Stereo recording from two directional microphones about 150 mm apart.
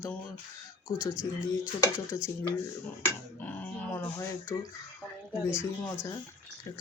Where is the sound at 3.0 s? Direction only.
10° left (ahead or behind).